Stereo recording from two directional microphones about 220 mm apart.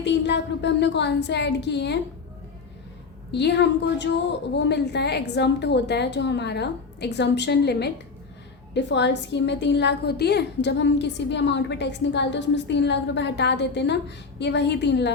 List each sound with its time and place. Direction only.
0.0 s a woman's voice: 50° left (ahead or behind)
3.3 s a woman's voice: 50° left (ahead or behind)